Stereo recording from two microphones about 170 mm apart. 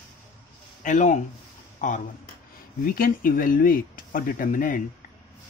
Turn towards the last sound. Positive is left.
turn(degrees=50)  # may be behind; listen again after turning